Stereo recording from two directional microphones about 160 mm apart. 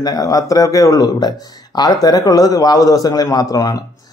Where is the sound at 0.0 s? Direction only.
20° left (ahead or behind).